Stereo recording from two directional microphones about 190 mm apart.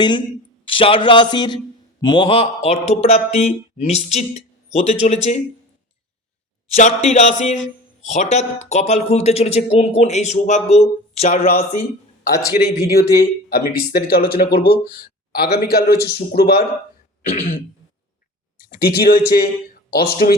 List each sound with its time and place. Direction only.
0.0 s a man's voice: 25° left (ahead or behind)
6.7 s speech: 40° left (ahead or behind)
12.5 s a man's voice: 55° left (ahead or behind)
18.7 s speech: 50° left (ahead or behind)